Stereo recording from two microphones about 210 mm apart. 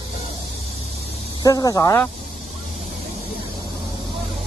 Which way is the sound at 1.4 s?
15° left (ahead or behind).